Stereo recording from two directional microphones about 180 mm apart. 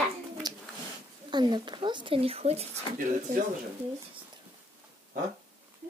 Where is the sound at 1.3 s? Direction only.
25° right (ahead or behind).